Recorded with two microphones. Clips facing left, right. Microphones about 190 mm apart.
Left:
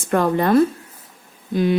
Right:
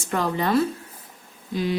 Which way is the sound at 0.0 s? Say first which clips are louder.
Left 6 dB; 55° left (ahead or behind).